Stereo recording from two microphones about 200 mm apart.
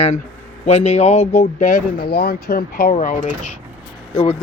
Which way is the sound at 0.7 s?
30° left (ahead or behind).